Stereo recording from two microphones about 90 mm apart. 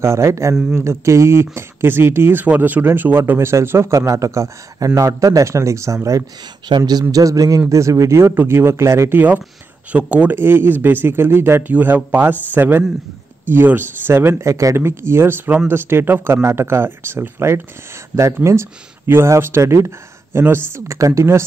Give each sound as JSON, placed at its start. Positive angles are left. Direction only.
{"t": 0.0, "sound": "a man's voice", "side_deg": -30}
{"t": 2.4, "sound": "a man's voice", "side_deg": -15}
{"t": 6.9, "sound": "a man's voice", "side_deg": -45}
{"t": 9.9, "sound": "a man's voice", "side_deg": -15}